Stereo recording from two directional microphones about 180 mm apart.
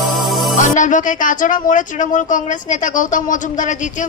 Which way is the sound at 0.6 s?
45° left (ahead or behind).